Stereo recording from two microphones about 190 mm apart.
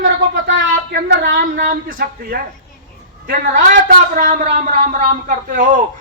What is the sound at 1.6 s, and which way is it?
A man's voice, 45° right (ahead or behind).